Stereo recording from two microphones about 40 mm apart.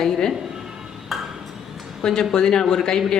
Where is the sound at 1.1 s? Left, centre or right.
Centre.